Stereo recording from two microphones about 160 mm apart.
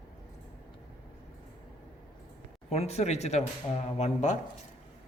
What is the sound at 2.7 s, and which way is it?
Speech, 40° left (ahead or behind).